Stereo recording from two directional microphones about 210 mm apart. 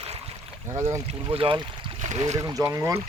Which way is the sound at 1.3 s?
25° right (ahead or behind).